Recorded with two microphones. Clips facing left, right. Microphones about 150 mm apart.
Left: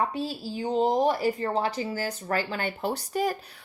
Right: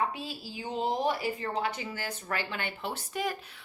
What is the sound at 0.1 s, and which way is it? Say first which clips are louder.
A woman's voice: left 8 dB; 40° left (ahead or behind).